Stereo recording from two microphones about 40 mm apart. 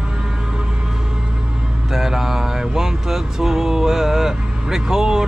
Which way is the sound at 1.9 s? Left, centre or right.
Centre.